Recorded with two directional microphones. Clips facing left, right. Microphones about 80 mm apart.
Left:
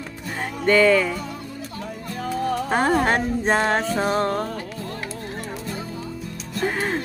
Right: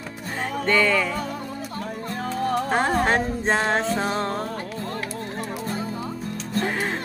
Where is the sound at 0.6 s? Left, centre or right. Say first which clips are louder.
Left 5 dB; centre.